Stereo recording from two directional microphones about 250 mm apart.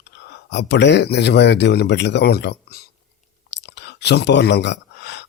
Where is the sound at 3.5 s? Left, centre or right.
Left.